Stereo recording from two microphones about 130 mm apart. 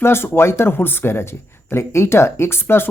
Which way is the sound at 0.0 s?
20° left (ahead or behind).